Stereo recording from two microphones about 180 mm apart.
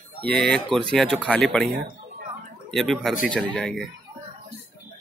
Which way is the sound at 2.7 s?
Centre (ahead or behind).